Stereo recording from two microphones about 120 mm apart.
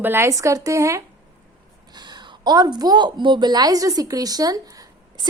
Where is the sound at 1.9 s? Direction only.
35° right (ahead or behind).